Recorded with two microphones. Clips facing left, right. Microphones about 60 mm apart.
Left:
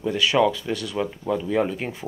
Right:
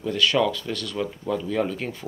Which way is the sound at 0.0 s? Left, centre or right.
Centre.